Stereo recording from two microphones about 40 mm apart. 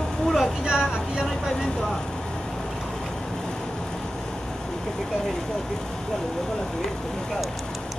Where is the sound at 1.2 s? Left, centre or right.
Centre.